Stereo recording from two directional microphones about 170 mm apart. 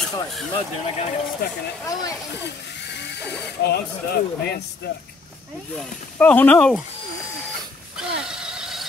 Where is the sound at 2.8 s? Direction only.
90° left; by 4.6 s 75° left (ahead or behind).